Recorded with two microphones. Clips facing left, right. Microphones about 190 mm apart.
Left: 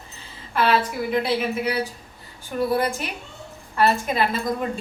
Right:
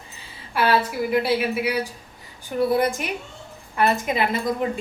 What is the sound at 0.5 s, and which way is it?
A woman's voice, 10° right (ahead or behind).